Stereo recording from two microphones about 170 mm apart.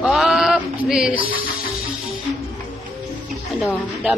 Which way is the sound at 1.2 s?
60° left (ahead or behind).